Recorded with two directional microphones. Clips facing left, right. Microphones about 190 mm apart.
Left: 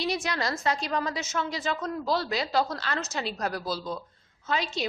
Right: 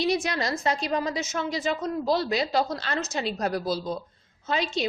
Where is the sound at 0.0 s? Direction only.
20° right (ahead or behind).